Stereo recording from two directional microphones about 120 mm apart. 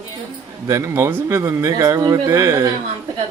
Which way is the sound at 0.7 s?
25° right (ahead or behind).